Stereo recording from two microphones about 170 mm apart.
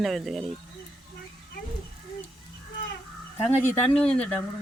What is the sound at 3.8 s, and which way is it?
Speech, 5° left (ahead or behind).